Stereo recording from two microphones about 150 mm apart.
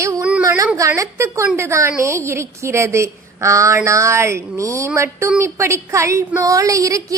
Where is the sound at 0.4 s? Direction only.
20° right (ahead or behind).